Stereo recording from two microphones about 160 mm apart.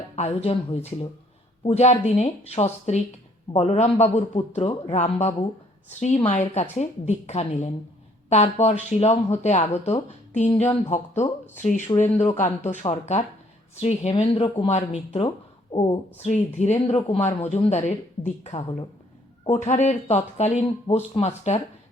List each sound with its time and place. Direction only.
0.2 s speech: 40° left (ahead or behind)
5.9 s speech: 50° left (ahead or behind); by 16.0 s 30° left (ahead or behind)
16.2 s speech: 45° left (ahead or behind)